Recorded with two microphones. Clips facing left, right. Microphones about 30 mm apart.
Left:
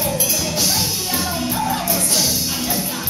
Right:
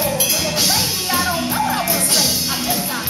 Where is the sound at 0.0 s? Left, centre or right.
Right.